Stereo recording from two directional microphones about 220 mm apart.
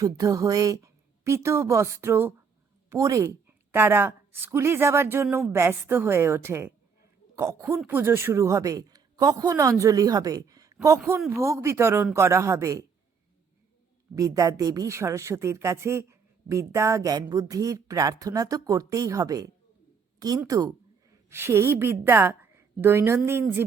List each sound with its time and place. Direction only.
0.0 s a woman's voice: 15° right (ahead or behind)
14.2 s a woman's voice: 15° right (ahead or behind)